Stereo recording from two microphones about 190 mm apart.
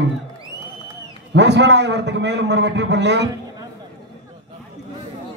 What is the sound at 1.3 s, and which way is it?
A man's voice, 65° right (ahead or behind).